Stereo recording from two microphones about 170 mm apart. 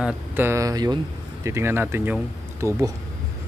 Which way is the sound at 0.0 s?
10° right (ahead or behind).